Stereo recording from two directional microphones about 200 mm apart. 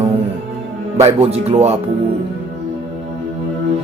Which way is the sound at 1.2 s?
30° right (ahead or behind).